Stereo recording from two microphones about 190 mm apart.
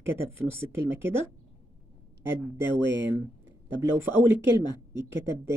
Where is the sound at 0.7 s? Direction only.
10° right (ahead or behind).